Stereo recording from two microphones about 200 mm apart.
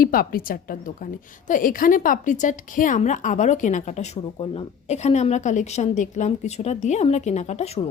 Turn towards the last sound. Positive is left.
turn(degrees=35)  # may be behind; listen again after turning